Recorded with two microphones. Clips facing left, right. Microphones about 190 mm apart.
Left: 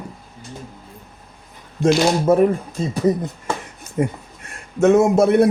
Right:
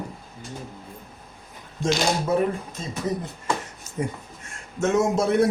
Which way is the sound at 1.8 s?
55° left (ahead or behind).